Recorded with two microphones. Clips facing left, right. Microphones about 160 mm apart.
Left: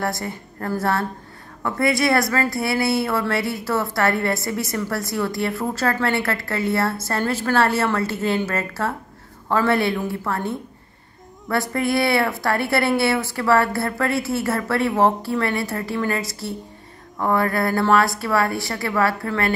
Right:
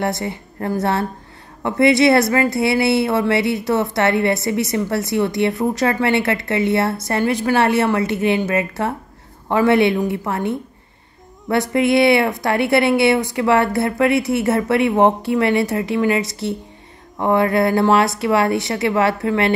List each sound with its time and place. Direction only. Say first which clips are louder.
0.0 s a woman's voice: right 4 dB; 20° right (ahead or behind)